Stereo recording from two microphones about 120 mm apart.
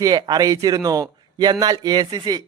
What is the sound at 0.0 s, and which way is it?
A man's voice, 30° right (ahead or behind).